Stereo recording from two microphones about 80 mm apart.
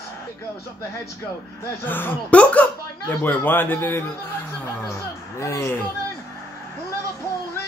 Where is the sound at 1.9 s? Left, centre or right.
Left.